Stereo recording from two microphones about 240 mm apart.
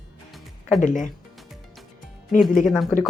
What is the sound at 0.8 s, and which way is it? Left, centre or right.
Speech, left.